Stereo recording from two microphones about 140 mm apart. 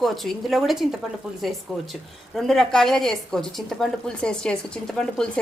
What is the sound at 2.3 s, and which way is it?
A woman's voice, centre (ahead or behind).